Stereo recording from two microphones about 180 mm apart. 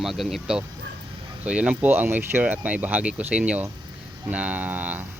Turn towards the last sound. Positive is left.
turn(degrees=-10)  # may be behind; listen again after turning